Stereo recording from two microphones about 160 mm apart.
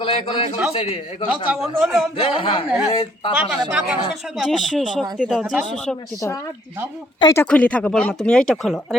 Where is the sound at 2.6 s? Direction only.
5° right (ahead or behind).